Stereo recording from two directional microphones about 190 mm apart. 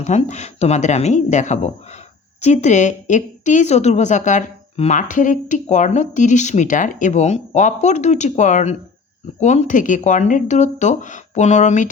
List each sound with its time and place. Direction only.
0.0 s a woman's voice: 35° left (ahead or behind)